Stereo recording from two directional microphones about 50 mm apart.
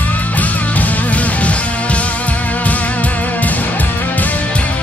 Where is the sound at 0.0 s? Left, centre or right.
Left.